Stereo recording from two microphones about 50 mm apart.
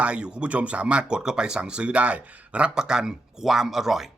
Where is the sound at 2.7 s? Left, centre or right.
Centre.